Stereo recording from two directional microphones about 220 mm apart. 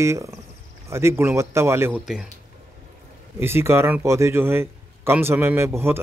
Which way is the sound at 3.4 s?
10° right (ahead or behind).